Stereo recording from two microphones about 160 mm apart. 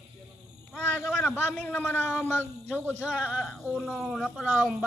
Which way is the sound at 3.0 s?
5° right (ahead or behind).